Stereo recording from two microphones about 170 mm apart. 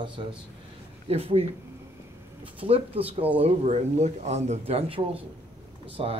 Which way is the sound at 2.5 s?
35° right (ahead or behind).